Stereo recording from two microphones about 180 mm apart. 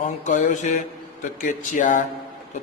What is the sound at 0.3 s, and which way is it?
A man's voice, 40° left (ahead or behind).